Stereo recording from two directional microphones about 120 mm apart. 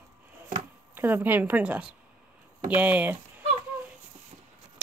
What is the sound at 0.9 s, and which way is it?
A woman's voice, 15° right (ahead or behind).